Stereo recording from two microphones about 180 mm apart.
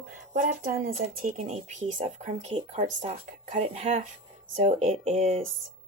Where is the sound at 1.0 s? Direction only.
40° right (ahead or behind).